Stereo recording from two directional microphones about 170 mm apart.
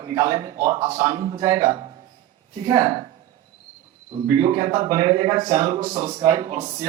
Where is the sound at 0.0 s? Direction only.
25° right (ahead or behind).